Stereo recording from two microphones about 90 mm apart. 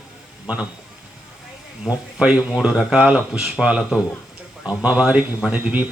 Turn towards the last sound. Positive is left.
turn(degrees=-15)  # may be behind; listen again after turning